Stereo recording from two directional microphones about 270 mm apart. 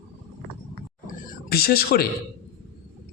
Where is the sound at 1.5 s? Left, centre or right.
Left.